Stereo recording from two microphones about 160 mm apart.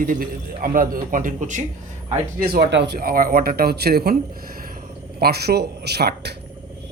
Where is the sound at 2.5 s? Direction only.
90° right; by 4.7 s 65° right (ahead or behind).